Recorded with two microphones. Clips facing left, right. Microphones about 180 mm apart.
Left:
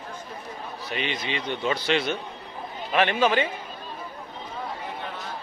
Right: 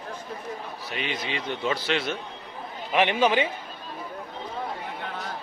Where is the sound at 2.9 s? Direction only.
20° right (ahead or behind).